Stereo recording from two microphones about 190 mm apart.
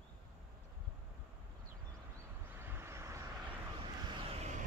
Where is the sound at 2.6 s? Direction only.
10° right (ahead or behind).